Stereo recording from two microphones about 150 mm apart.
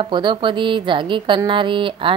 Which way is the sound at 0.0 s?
30° right (ahead or behind).